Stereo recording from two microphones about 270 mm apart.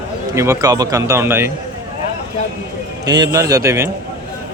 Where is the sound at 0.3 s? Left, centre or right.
Centre.